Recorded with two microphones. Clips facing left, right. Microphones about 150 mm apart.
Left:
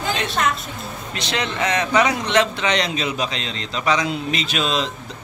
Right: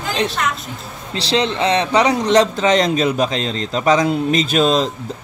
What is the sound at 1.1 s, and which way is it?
A man's voice, 30° right (ahead or behind).